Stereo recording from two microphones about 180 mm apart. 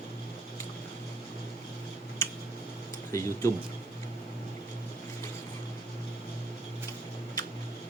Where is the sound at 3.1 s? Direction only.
15° left (ahead or behind).